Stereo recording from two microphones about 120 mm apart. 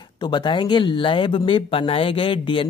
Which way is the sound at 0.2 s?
40° left (ahead or behind).